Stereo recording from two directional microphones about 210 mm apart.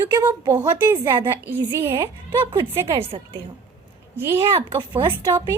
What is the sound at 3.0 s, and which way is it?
Speech, 25° right (ahead or behind).